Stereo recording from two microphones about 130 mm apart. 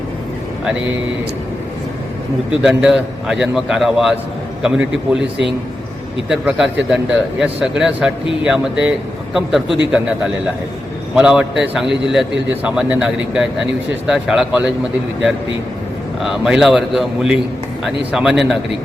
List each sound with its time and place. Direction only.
2.6 s a man's voice: 5° right (ahead or behind)
6.2 s a man's voice: 5° right (ahead or behind)
16.2 s a man's voice: 5° right (ahead or behind)